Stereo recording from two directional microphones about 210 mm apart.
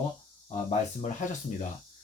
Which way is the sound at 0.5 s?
35° left (ahead or behind).